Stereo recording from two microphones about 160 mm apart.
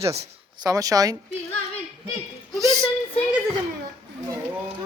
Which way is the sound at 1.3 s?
40° left (ahead or behind).